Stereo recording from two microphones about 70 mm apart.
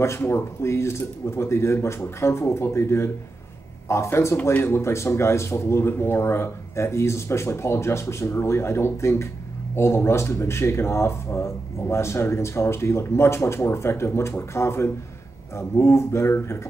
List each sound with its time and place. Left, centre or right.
0.2 s speech: left